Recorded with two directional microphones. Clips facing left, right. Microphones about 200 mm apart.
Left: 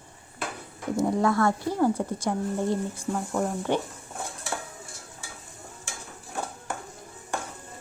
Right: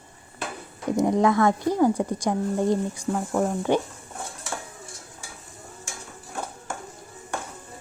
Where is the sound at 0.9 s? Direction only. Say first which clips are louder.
Right 3 dB; 20° right (ahead or behind).